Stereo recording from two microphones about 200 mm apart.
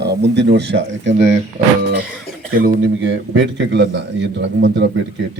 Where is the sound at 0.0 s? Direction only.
55° right (ahead or behind).